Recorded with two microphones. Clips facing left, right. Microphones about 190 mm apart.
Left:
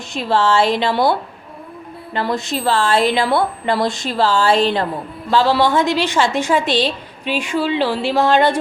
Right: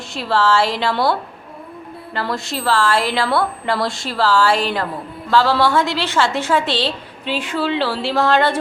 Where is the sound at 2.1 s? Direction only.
20° left (ahead or behind).